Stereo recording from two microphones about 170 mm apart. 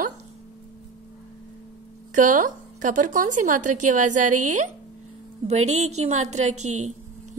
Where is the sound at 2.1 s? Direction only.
50° right (ahead or behind).